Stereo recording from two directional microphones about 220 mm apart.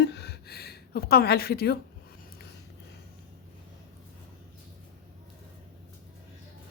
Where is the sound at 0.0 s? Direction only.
50° left (ahead or behind).